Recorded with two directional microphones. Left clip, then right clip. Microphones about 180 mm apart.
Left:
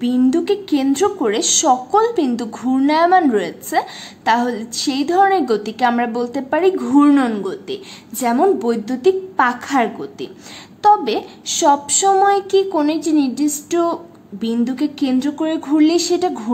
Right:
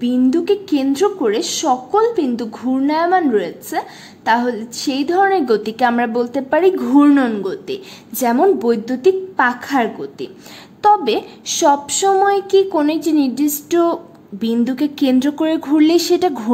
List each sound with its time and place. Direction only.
0.0 s a woman's voice: 5° right (ahead or behind)